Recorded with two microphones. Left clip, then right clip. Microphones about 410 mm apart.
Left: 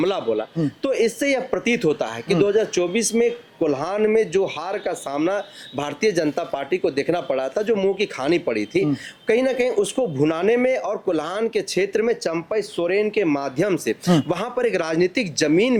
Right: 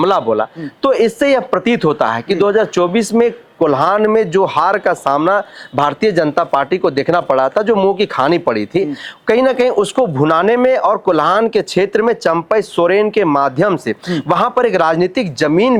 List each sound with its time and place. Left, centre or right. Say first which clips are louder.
0.0 s speech: right 9 dB; right